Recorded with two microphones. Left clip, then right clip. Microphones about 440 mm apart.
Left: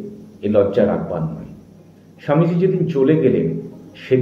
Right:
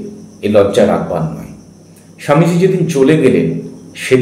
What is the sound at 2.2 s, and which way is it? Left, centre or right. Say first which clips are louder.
A man's voice: right 6 dB; left.